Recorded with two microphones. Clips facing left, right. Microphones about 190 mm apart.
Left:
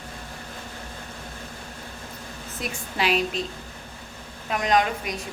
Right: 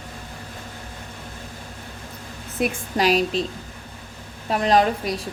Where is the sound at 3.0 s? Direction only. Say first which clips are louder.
Right 5 dB; 40° right (ahead or behind).